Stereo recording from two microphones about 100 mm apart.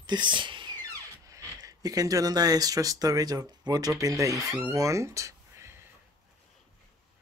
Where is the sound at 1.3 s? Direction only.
35° right (ahead or behind).